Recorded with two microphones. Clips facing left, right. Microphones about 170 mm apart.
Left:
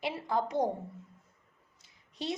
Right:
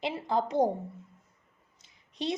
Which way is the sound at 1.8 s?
20° right (ahead or behind).